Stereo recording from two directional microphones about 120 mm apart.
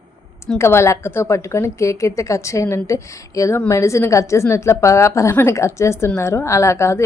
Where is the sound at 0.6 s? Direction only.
20° left (ahead or behind).